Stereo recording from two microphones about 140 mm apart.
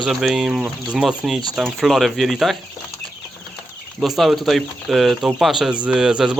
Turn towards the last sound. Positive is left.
turn(degrees=-5)  # may be behind; listen again after turning